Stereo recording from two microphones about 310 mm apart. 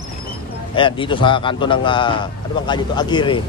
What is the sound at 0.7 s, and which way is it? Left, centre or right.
A man's voice, centre.